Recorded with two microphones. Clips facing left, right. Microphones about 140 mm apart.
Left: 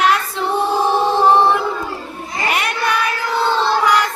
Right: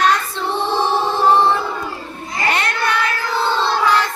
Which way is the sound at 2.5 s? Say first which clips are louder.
Even; 10° left (ahead or behind).